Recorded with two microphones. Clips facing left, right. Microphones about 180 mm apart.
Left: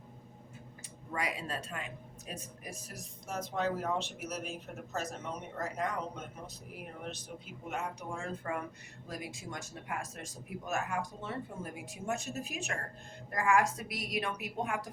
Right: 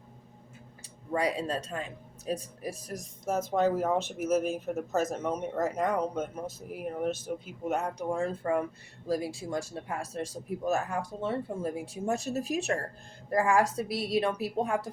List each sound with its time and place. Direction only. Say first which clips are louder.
1.1 s speech: right 8 dB; 35° right (ahead or behind)
3.2 s speech: right 8 dB; 50° right (ahead or behind)
7.4 s speech: right 7 dB; 40° right (ahead or behind)